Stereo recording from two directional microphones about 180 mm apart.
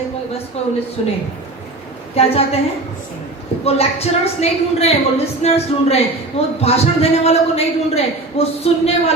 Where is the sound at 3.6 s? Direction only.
35° left (ahead or behind).